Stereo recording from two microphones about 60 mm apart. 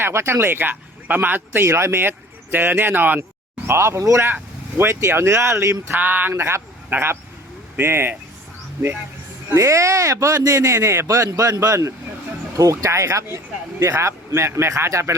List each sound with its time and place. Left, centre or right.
0.0 s speech: right
1.6 s speech: right
3.7 s speech: right
4.0 s speech: right
4.8 s speech: right
6.0 s speech: right
6.9 s speech: right
9.6 s speech: right